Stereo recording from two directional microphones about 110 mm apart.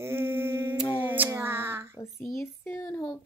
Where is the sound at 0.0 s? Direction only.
20° right (ahead or behind).